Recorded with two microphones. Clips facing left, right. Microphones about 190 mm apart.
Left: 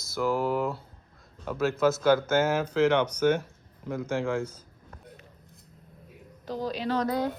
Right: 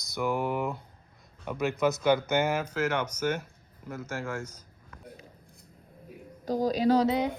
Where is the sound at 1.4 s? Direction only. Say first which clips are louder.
Left 2 dB; 10° right (ahead or behind).